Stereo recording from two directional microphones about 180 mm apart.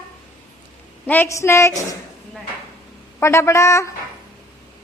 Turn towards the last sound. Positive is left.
turn(degrees=15)  # may be behind; listen again after turning